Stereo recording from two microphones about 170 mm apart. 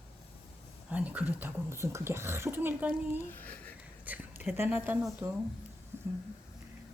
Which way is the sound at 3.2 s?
10° left (ahead or behind).